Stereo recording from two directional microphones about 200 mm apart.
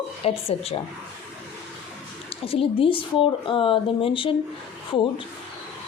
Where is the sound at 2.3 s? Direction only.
30° left (ahead or behind).